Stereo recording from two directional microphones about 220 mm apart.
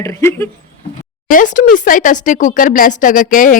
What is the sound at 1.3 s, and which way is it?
Speech, 35° left (ahead or behind).